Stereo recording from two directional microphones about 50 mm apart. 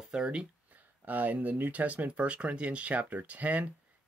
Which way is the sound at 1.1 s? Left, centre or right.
Right.